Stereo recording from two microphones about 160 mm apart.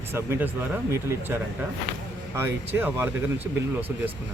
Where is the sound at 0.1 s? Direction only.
15° right (ahead or behind).